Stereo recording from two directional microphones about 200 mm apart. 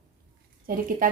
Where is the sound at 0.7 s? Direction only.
45° right (ahead or behind).